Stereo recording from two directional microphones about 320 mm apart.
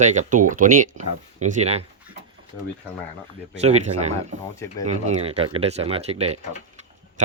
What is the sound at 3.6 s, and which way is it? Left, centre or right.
Speech, centre.